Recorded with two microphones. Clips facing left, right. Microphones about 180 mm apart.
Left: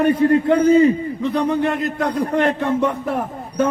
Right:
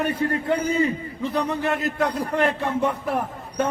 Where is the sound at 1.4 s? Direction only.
30° left (ahead or behind).